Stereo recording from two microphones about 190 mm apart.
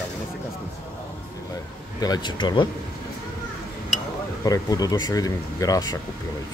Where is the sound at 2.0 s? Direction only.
20° left (ahead or behind).